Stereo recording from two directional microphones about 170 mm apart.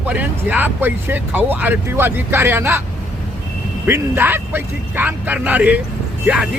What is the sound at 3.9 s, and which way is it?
Speech, 10° right (ahead or behind).